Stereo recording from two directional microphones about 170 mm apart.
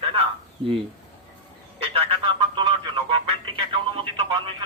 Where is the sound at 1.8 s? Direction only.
35° right (ahead or behind).